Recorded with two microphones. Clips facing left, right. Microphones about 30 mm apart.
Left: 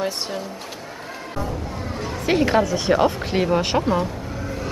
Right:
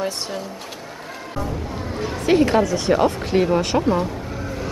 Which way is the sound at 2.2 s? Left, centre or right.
Centre.